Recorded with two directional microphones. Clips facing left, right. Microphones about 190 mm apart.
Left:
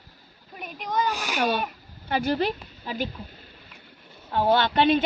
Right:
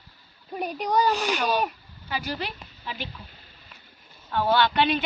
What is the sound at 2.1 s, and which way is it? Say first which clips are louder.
A woman's voice: left 7 dB; 55° left (ahead or behind).